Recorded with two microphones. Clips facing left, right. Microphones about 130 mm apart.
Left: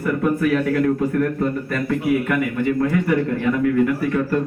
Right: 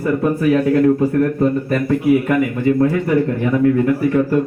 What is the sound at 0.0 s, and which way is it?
A man's voice, 25° right (ahead or behind).